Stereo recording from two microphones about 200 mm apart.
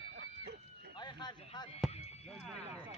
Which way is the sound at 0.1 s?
60° right (ahead or behind).